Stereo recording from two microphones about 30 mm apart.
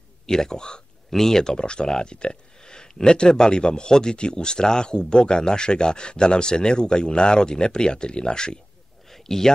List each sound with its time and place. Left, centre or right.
0.3 s speech: centre
1.1 s speech: centre
9.1 s a sound: centre